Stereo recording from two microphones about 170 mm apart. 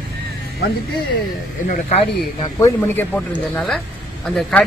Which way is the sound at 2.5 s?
15° left (ahead or behind).